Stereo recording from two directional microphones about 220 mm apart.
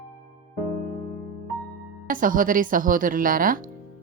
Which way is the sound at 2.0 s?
40° right (ahead or behind).